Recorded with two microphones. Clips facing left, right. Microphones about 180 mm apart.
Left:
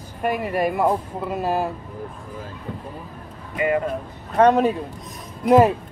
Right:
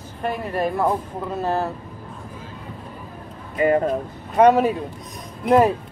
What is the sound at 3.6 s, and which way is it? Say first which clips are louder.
Speech: right 3 dB; 35° right (ahead or behind).